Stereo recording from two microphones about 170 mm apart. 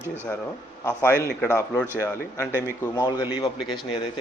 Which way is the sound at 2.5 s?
15° right (ahead or behind).